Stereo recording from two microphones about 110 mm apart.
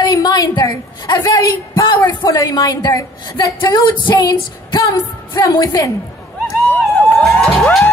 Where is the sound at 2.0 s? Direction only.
35° left (ahead or behind).